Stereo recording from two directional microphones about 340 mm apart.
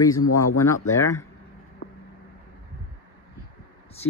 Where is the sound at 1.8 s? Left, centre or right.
Left.